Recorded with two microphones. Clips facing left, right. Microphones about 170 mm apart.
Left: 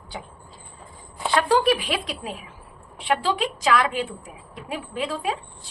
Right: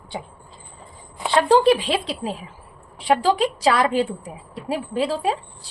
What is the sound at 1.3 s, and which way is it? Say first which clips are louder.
A woman's voice: right 4 dB; 30° right (ahead or behind).